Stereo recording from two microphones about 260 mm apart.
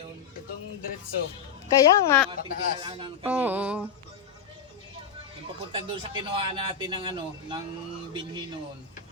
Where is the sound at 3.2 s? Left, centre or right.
Centre.